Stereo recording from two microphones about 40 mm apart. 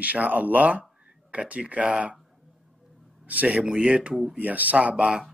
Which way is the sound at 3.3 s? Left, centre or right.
Right.